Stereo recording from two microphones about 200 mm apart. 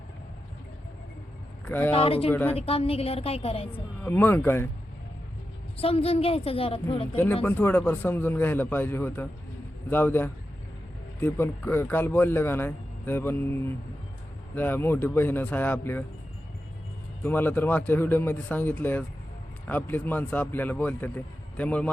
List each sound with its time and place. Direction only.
1.6 s speech: 10° left (ahead or behind)
1.9 s a woman's voice: 30° left (ahead or behind)
2.3 s speech: 10° left (ahead or behind)
2.6 s a woman's voice: 30° left (ahead or behind)
4.0 s speech: 10° left (ahead or behind)
5.7 s a woman's voice: 30° left (ahead or behind)
7.4 s speech: 10° left (ahead or behind)
17.2 s speech: 10° left (ahead or behind)